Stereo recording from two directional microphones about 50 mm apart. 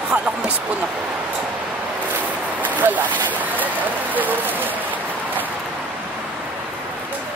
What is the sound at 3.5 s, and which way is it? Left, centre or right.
Speech, right.